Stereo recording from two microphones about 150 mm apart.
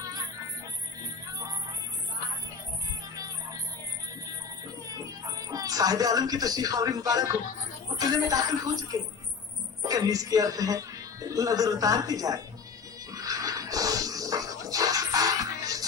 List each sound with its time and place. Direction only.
5.5 s speech: 25° right (ahead or behind)
13.1 s pant: 25° right (ahead or behind)